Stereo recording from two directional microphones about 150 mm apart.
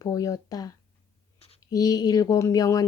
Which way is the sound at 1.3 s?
40° left (ahead or behind).